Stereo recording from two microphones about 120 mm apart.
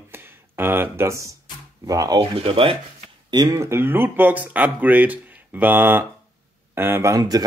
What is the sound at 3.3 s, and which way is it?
Speech, 35° right (ahead or behind).